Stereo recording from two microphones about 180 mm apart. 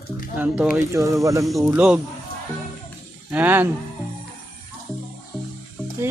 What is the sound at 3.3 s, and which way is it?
Speech, 10° right (ahead or behind).